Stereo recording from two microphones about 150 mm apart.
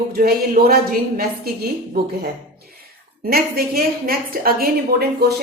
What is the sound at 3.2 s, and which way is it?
A woman's voice, 90° right.